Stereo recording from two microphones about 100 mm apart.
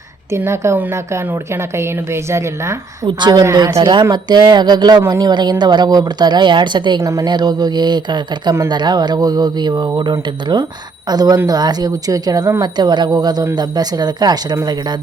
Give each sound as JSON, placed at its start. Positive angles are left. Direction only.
{"t": 0.3, "sound": "a woman's voice", "side_deg": -25}
{"t": 3.1, "sound": "speech", "side_deg": -45}
{"t": 3.4, "sound": "speech", "side_deg": -35}
{"t": 7.0, "sound": "speech", "side_deg": -30}
{"t": 7.3, "sound": "speech", "side_deg": -45}